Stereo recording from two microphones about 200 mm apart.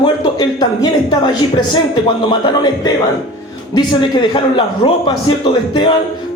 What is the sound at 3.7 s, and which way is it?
Speech, 25° left (ahead or behind).